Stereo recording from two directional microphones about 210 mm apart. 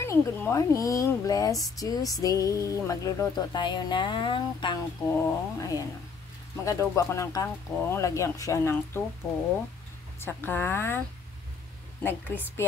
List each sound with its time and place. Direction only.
0.0 s speech: 15° left (ahead or behind)
10.2 s speech: 10° left (ahead or behind)
12.0 s speech: 10° left (ahead or behind)